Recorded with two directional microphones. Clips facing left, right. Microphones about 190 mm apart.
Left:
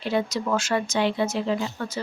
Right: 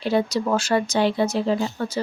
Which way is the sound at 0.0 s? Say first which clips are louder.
Right 4 dB; 35° right (ahead or behind).